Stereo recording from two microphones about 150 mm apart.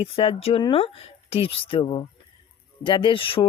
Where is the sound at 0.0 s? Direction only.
40° left (ahead or behind).